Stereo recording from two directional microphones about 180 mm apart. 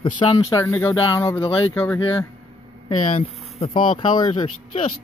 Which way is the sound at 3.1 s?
30° left (ahead or behind).